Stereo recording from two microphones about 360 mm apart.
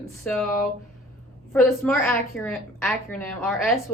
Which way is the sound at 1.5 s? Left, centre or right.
Centre.